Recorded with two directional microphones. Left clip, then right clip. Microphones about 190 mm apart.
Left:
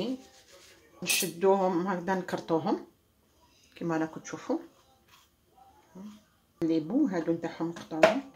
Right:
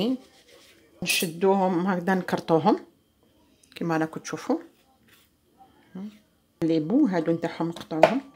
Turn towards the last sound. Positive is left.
turn(degrees=-50)  # may be behind; listen again after turning